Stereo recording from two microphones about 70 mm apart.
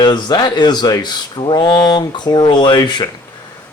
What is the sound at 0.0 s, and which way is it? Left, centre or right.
A man's voice, left.